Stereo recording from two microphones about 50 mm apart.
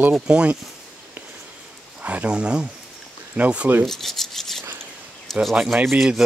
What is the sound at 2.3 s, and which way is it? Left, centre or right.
Speech, centre.